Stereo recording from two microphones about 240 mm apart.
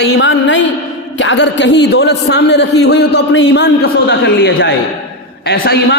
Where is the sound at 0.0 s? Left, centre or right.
Left.